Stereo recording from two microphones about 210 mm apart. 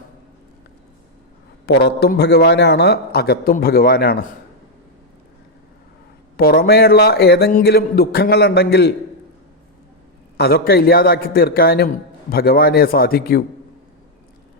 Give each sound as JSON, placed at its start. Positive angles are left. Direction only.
{"t": 1.6, "sound": "a man's voice", "side_deg": 50}
{"t": 6.3, "sound": "a man's voice", "side_deg": 45}
{"t": 10.3, "sound": "a man's voice", "side_deg": 50}